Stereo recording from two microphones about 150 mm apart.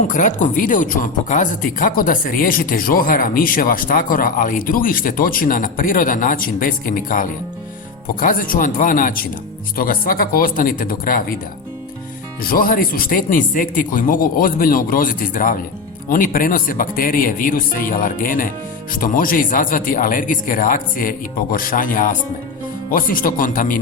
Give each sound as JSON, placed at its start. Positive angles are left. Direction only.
{"t": 0.1, "sound": "speech", "side_deg": 55}
{"t": 12.4, "sound": "speech", "side_deg": 75}